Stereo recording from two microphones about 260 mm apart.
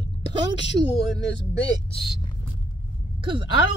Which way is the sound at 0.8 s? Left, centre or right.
Right.